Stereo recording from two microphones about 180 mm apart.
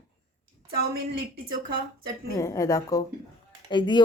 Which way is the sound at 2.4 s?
15° left (ahead or behind).